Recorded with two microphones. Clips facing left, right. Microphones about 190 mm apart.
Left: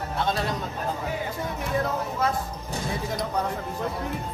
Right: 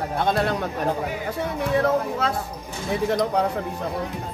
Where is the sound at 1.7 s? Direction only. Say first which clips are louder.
Right 6 dB; 75° right (ahead or behind).